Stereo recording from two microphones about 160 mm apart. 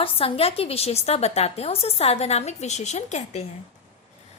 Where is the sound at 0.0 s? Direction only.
35° left (ahead or behind).